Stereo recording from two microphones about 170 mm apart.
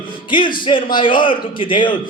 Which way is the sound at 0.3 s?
30° left (ahead or behind).